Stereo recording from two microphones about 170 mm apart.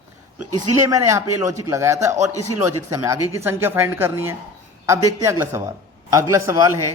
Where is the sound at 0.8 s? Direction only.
20° right (ahead or behind).